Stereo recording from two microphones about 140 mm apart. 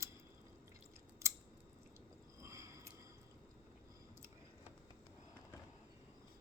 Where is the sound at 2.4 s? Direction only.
20° right (ahead or behind).